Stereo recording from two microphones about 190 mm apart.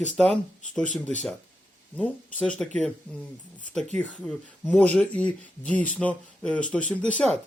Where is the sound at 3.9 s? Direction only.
5° left (ahead or behind).